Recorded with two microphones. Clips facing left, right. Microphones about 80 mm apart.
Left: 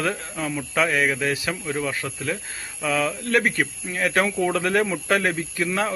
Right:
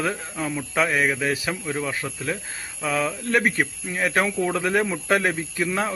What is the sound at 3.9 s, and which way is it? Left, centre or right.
Speech, centre.